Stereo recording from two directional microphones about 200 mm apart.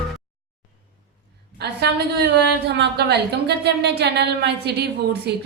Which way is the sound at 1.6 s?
55° right (ahead or behind).